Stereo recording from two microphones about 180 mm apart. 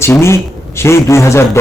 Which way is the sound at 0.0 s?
15° left (ahead or behind).